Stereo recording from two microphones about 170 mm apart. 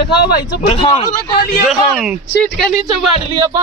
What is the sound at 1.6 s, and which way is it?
A man's voice, centre (ahead or behind).